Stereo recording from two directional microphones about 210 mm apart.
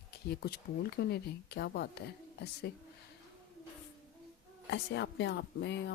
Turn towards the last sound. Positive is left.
turn(degrees=55)  # may be behind; listen again after turning